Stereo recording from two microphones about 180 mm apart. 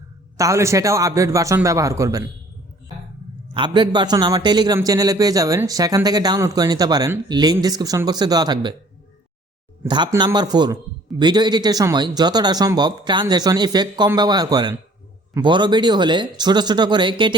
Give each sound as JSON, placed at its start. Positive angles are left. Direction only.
{"t": 0.3, "sound": "a man's voice", "side_deg": -15}
{"t": 3.5, "sound": "a man's voice", "side_deg": -25}
{"t": 9.8, "sound": "a man's voice", "side_deg": -25}